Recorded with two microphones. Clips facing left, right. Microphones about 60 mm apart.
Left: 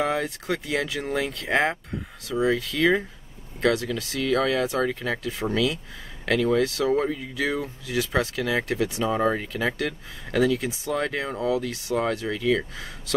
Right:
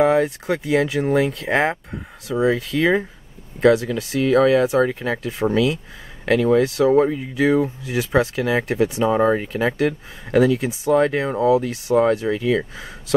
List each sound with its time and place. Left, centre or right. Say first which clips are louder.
0.0 s speech: right 9 dB; right